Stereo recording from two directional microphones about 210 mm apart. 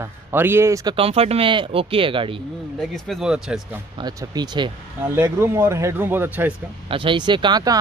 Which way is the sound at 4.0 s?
20° right (ahead or behind).